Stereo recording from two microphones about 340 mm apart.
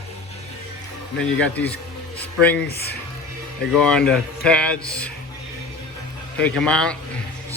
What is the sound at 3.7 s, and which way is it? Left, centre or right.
Speech, centre.